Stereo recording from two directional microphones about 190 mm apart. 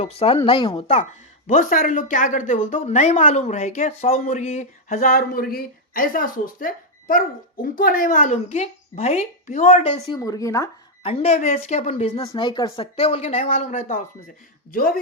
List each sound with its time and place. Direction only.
0.0 s a woman's voice: 30° left (ahead or behind)
1.5 s a woman's voice: 45° left (ahead or behind)
10.2 s speech: 20° left (ahead or behind)
11.0 s a woman's voice: 35° left (ahead or behind)
12.3 s a woman's voice: 25° left (ahead or behind); by 14.9 s 50° left (ahead or behind)